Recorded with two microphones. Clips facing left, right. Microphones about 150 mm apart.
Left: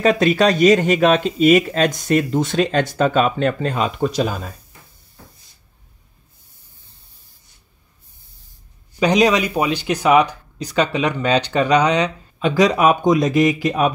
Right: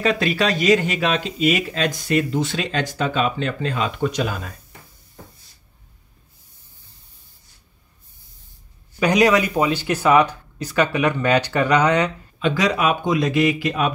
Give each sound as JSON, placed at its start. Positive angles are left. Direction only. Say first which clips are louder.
{"t": 0.0, "sound": "speech", "louder": "left 5 dB", "side_deg": 45}
{"t": 9.0, "sound": "speech", "louder": "left 1 dB", "side_deg": 20}
{"t": 12.4, "sound": "speech", "louder": "left 4 dB", "side_deg": 40}